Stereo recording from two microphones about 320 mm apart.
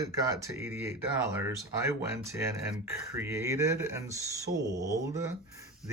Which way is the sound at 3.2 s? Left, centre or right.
Centre.